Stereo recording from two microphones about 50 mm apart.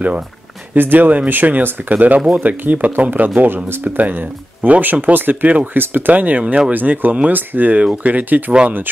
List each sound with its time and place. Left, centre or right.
0.7 s speech: right
3.3 s speech: right
3.8 s speech: right